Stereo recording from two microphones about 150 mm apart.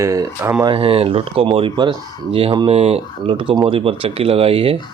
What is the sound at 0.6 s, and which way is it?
Speech, 35° right (ahead or behind).